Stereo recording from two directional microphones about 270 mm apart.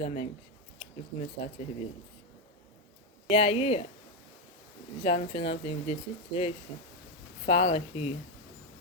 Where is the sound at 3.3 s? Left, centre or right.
Left.